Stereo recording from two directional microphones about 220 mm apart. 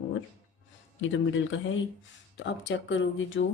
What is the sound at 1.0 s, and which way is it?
Speech, 60° left (ahead or behind).